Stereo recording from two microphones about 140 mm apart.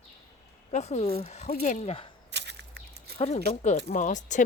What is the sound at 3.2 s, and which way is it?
Speech, 50° left (ahead or behind).